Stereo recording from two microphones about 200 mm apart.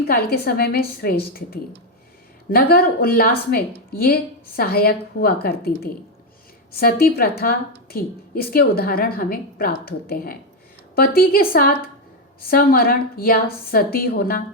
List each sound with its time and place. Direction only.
0.0 s a woman's voice: 50° left (ahead or behind)